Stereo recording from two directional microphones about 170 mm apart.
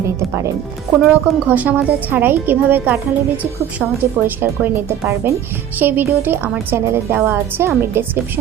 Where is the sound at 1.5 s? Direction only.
10° right (ahead or behind).